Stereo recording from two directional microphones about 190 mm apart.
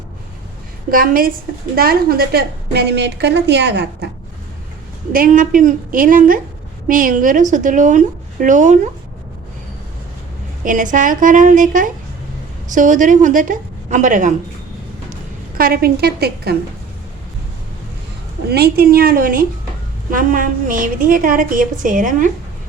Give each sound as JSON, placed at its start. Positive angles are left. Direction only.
{"t": 0.9, "sound": "a woman's voice", "side_deg": -50}
{"t": 5.1, "sound": "a woman's voice", "side_deg": -45}
{"t": 10.6, "sound": "a woman's voice", "side_deg": -45}
{"t": 15.5, "sound": "a woman's voice", "side_deg": -50}
{"t": 18.4, "sound": "a woman's voice", "side_deg": -55}